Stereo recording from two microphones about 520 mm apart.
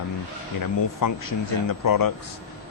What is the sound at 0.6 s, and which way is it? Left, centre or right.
Speech, left.